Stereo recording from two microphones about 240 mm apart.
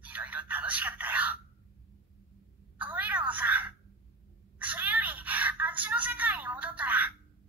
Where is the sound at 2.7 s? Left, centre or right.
Centre.